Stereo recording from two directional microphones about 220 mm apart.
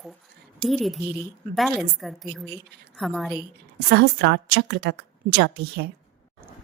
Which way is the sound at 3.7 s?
50° right (ahead or behind).